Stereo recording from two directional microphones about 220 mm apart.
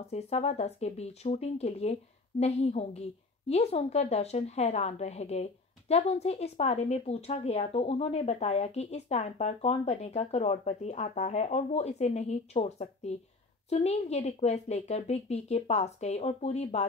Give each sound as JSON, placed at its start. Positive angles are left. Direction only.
{"t": 0.1, "sound": "a woman's voice", "side_deg": 30}